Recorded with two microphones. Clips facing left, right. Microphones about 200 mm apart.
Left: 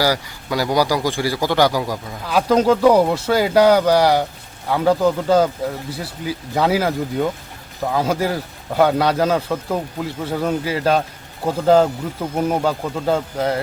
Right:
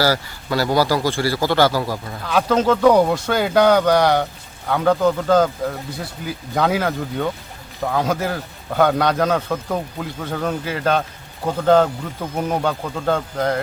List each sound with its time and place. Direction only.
0.0 s a man's voice: 15° left (ahead or behind)